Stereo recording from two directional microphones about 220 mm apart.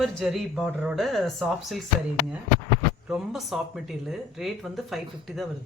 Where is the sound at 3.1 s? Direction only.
Centre (ahead or behind).